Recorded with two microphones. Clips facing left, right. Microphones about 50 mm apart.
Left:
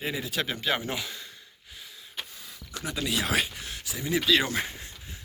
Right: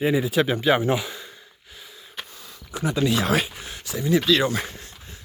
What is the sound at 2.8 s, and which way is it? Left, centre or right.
Speech, centre.